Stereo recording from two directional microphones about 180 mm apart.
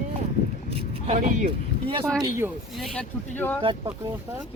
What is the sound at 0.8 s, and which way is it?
Vehicle, 30° right (ahead or behind).